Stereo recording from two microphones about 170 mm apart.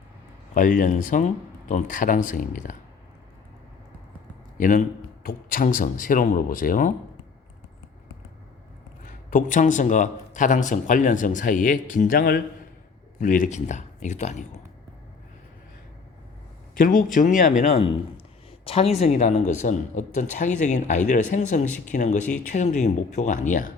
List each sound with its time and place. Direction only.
0.5 s speech: 50° left (ahead or behind)
4.5 s speech: 50° left (ahead or behind)
9.0 s speech: 50° left (ahead or behind)
13.1 s speech: 50° left (ahead or behind)
16.7 s speech: 55° left (ahead or behind)